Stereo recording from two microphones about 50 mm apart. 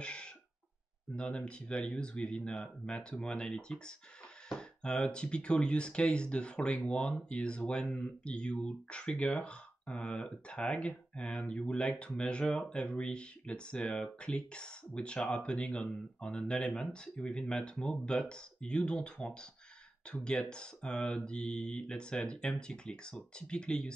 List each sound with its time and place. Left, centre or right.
0.0 s cough: left
1.1 s speech: left